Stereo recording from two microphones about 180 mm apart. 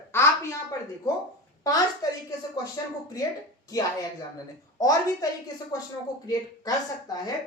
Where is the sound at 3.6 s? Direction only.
20° left (ahead or behind).